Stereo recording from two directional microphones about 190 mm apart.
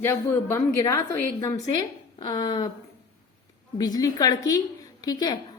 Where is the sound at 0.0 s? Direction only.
10° left (ahead or behind).